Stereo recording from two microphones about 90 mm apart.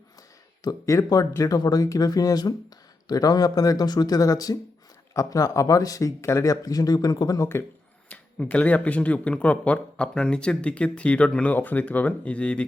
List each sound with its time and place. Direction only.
0.6 s speech: 40° left (ahead or behind)
8.1 s speech: 15° left (ahead or behind)